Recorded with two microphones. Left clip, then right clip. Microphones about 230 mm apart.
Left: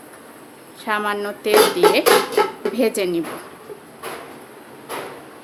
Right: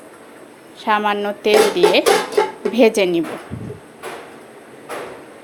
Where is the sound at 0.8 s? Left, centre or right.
Centre.